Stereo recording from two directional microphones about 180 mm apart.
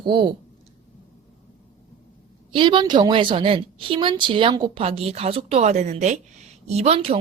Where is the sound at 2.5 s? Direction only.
25° right (ahead or behind).